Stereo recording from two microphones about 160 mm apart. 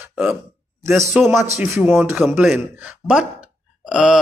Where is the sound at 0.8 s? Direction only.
15° right (ahead or behind).